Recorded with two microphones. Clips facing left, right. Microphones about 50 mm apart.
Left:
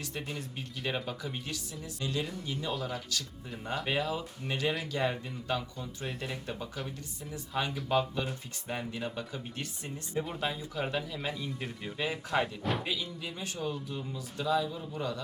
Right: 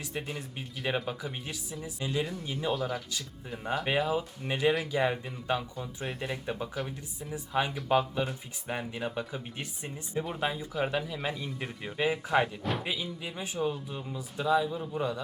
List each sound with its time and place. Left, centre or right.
0.0 s speech: centre
3.8 s speech: centre